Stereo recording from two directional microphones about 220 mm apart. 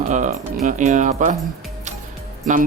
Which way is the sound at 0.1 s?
35° right (ahead or behind).